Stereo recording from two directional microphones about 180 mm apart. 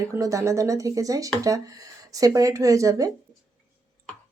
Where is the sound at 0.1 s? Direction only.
15° right (ahead or behind).